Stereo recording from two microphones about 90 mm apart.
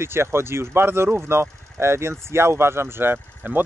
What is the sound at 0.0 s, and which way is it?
Speech, 30° right (ahead or behind).